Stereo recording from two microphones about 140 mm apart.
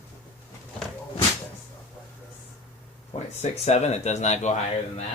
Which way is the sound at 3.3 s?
50° left (ahead or behind).